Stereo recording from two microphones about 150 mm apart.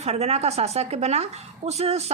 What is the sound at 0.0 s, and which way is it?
A woman's voice, 45° right (ahead or behind).